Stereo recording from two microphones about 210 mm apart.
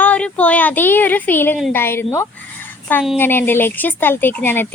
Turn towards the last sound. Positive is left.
turn(degrees=10)  # may be behind; listen again after turning